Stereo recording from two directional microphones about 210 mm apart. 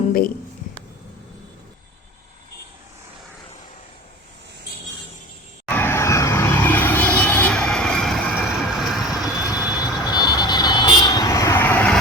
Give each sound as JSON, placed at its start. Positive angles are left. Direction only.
{"t": 5.6, "sound": "vehicle", "side_deg": 10}
{"t": 9.5, "sound": "vehicle", "side_deg": 20}